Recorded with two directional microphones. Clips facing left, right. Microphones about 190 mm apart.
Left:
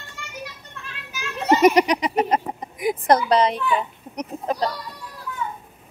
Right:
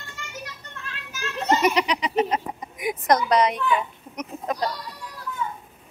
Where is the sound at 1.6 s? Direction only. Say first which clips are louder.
Left 6 dB; 45° left (ahead or behind).